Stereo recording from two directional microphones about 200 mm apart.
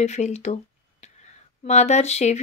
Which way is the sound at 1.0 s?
35° left (ahead or behind).